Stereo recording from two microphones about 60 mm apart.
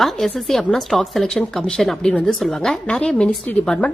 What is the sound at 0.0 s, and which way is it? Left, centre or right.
Speech, centre.